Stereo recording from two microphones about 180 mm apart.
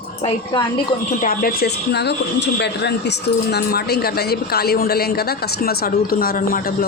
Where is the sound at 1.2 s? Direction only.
55° left (ahead or behind).